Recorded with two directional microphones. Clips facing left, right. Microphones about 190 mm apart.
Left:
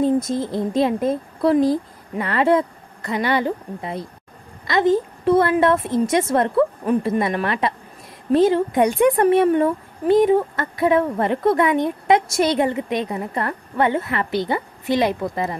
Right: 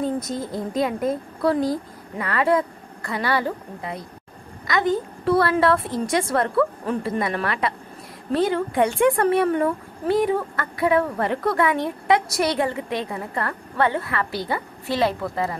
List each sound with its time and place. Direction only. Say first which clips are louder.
0.3 s speech: left 5 dB; 25° left (ahead or behind)